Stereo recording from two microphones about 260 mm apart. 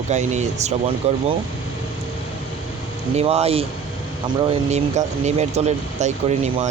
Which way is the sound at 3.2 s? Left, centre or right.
Right.